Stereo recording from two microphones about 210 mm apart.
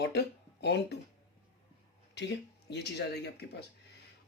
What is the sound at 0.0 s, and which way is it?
Speech, 55° left (ahead or behind).